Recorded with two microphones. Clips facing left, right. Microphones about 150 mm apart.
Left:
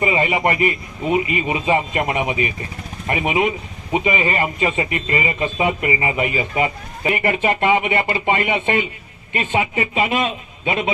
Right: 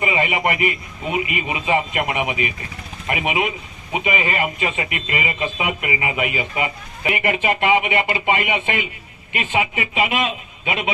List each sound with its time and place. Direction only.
0.0 s a man's voice: 35° left (ahead or behind)